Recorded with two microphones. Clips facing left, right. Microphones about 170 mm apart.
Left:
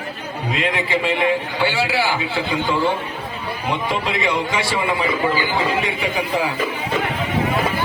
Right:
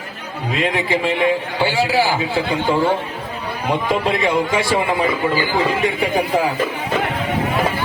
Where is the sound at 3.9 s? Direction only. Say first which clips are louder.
Right 5 dB; 50° right (ahead or behind).